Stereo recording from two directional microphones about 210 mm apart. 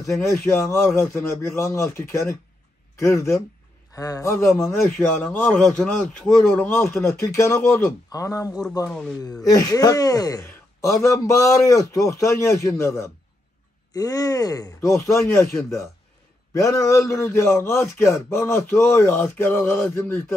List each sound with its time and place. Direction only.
0.0 s a man's voice: 15° left (ahead or behind)
9.2 s a man's voice: 15° left (ahead or behind)